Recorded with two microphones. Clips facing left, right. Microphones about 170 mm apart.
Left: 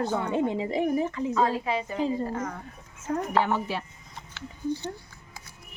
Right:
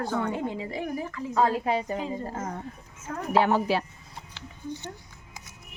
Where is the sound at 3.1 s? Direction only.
25° left (ahead or behind).